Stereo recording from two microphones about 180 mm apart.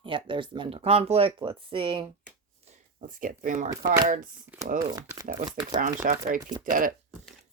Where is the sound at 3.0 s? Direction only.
50° right (ahead or behind).